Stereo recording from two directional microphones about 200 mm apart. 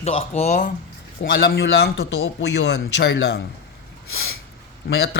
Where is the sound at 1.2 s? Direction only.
55° left (ahead or behind).